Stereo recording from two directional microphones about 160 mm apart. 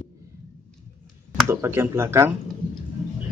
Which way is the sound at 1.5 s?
15° right (ahead or behind).